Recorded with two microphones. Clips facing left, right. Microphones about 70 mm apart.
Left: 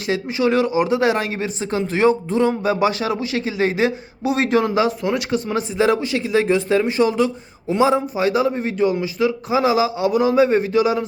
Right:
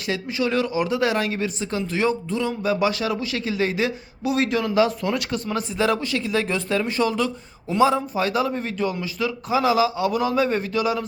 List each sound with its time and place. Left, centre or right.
0.1 s speech: left